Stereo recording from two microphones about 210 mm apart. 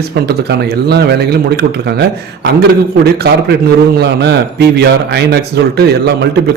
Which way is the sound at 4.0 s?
50° right (ahead or behind).